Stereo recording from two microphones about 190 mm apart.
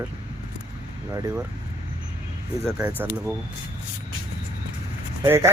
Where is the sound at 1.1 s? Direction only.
15° right (ahead or behind).